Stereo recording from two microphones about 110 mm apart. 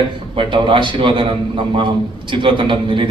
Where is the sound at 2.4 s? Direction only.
50° right (ahead or behind).